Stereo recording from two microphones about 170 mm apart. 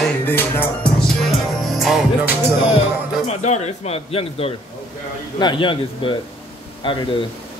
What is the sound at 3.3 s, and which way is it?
A man's voice, 40° left (ahead or behind).